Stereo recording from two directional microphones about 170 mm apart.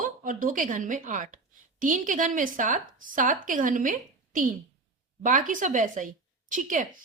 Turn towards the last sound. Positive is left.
turn(degrees=-50)  # may be behind; listen again after turning